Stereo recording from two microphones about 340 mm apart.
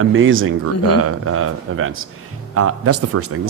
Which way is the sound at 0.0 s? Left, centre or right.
Right.